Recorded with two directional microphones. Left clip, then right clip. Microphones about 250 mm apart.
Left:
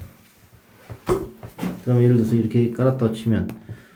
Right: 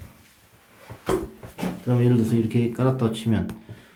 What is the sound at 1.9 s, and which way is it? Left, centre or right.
Speech, centre.